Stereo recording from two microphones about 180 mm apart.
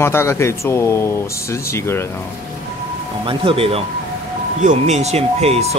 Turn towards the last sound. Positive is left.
turn(degrees=-35)  # may be behind; listen again after turning